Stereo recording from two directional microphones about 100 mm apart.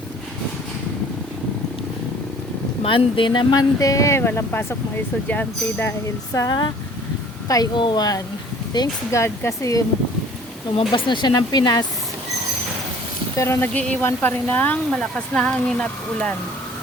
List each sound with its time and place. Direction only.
2.8 s speech: 60° left (ahead or behind); by 5.9 s 15° left (ahead or behind)
6.5 s speech: 50° left (ahead or behind)
7.4 s speech: 35° left (ahead or behind)
7.8 s speech: 50° left (ahead or behind)
9.1 s speech: 30° left (ahead or behind)
10.8 s speech: 55° left (ahead or behind)
13.3 s speech: 30° left (ahead or behind)
13.7 s speech: 10° left (ahead or behind)